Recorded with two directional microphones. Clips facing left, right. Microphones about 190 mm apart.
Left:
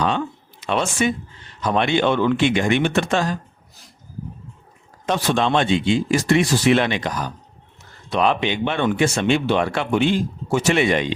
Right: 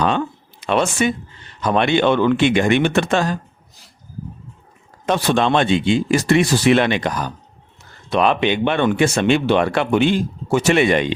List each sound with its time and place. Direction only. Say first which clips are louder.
0.6 s speech: right 3 dB; 60° right (ahead or behind)
5.0 s speech: right 3 dB; 60° right (ahead or behind)
8.1 s speech: right 3 dB; 65° right (ahead or behind)